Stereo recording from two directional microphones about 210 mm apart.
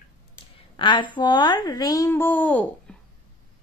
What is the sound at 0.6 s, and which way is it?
A woman's voice, 25° left (ahead or behind).